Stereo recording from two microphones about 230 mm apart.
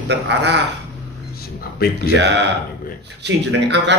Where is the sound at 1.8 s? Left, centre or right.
Left.